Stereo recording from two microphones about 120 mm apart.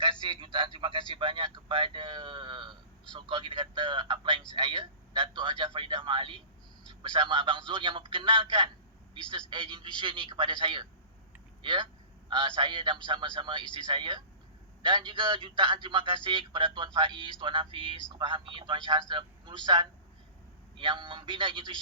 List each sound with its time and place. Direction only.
0.0 s a man's voice: 45° right (ahead or behind)